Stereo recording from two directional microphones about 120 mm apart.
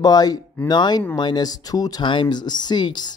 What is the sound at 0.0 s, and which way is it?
Speech, 30° left (ahead or behind).